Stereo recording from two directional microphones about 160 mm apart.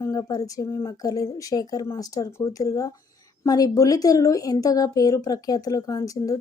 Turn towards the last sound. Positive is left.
turn(degrees=20)  # may be behind; listen again after turning